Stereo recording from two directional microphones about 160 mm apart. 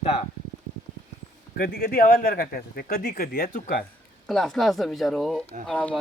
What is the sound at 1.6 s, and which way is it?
Speech, 65° left (ahead or behind).